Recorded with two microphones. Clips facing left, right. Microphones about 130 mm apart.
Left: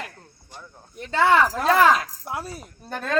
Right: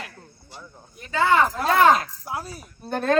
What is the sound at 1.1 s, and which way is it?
Speech, 80° left.